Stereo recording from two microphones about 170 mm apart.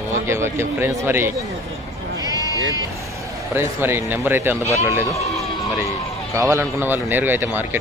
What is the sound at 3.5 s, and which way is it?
A man's voice, 15° right (ahead or behind).